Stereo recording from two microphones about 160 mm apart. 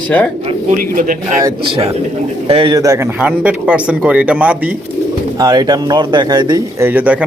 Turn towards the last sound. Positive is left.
turn(degrees=-10)  # may be behind; listen again after turning